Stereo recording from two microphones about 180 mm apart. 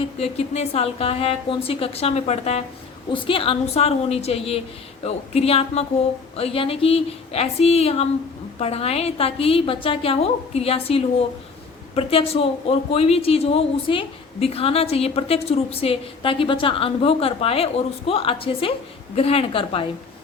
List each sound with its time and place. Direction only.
0.2 s speech: 35° left (ahead or behind)